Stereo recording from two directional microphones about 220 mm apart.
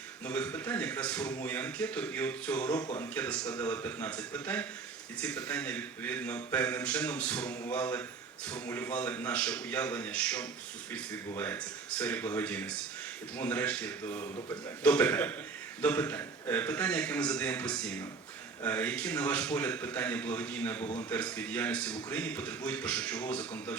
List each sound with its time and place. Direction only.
0.3 s a man's voice: 10° left (ahead or behind)
2.8 s speech: 20° left (ahead or behind)
3.2 s a man's voice: 5° left (ahead or behind)